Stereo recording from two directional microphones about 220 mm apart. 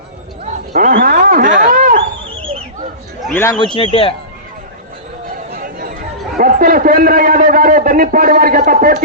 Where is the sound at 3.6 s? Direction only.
25° left (ahead or behind).